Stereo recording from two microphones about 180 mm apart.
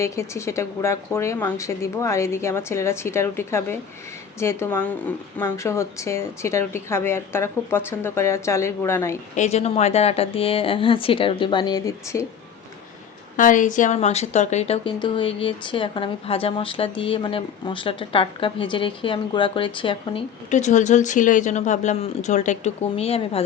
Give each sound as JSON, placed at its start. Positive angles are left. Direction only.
{"t": 0.0, "sound": "speech", "side_deg": 15}
{"t": 9.3, "sound": "speech", "side_deg": 40}
{"t": 13.3, "sound": "a woman's voice", "side_deg": 45}
{"t": 20.5, "sound": "speech", "side_deg": 40}